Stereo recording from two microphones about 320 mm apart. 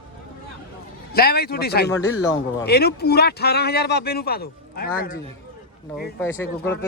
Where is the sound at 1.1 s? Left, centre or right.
Left.